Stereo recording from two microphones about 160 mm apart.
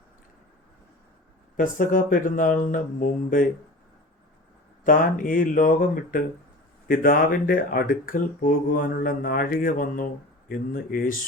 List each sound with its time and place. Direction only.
1.5 s speech: 55° left (ahead or behind)
4.8 s speech: 55° left (ahead or behind)